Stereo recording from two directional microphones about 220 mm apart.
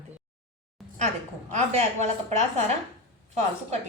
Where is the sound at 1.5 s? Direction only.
30° right (ahead or behind).